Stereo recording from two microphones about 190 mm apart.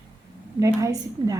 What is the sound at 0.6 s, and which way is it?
Speech, 15° right (ahead or behind).